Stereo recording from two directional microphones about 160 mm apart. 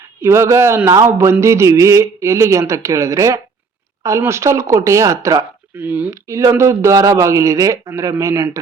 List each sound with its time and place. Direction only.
0.2 s a man's voice: 15° right (ahead or behind)